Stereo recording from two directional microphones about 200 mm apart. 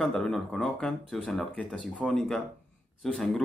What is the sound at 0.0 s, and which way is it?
Speech, centre (ahead or behind).